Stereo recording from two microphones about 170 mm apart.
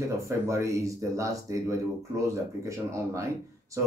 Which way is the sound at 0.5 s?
15° right (ahead or behind).